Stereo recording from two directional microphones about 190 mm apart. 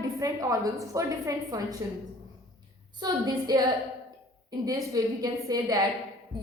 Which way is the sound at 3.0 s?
20° right (ahead or behind).